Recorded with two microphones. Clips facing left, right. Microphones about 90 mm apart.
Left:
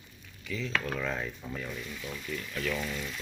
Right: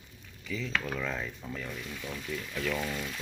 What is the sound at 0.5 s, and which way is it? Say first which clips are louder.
Speech: left 1 dB; centre (ahead or behind).